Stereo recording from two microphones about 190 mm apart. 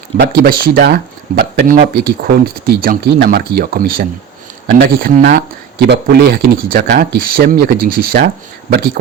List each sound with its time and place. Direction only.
0.2 s speech: 55° right (ahead or behind)